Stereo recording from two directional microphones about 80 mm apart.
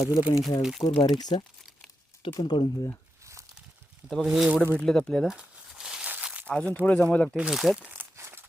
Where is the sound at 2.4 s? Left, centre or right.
Left.